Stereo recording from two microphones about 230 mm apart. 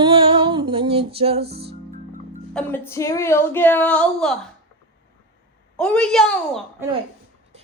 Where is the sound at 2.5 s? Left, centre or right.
Centre.